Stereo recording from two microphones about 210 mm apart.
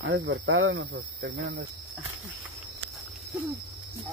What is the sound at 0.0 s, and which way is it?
Speech, 60° right (ahead or behind).